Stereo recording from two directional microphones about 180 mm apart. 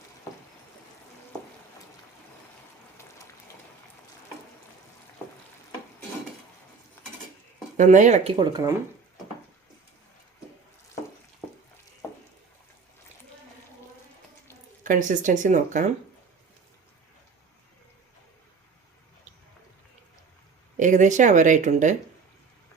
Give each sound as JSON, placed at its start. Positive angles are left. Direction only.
{"t": 7.8, "sound": "speech", "side_deg": -45}
{"t": 8.4, "sound": "speech", "side_deg": -20}
{"t": 14.8, "sound": "speech", "side_deg": -45}
{"t": 20.7, "sound": "speech", "side_deg": -45}